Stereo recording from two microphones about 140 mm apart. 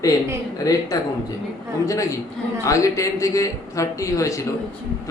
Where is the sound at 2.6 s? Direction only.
25° left (ahead or behind).